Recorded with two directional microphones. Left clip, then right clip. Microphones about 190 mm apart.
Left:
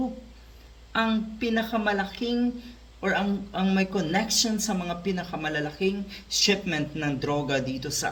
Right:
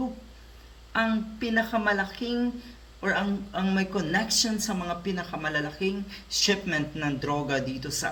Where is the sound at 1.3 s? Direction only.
15° left (ahead or behind).